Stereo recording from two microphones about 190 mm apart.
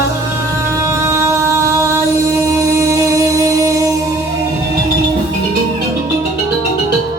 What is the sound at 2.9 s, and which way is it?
Music, 15° right (ahead or behind).